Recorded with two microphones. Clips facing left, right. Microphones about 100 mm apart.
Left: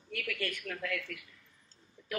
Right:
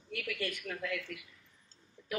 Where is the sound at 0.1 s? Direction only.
15° right (ahead or behind).